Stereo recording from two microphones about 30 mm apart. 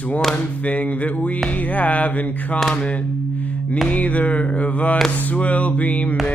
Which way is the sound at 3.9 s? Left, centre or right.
Left.